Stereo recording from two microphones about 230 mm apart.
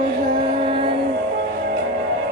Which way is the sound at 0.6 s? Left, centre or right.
Right.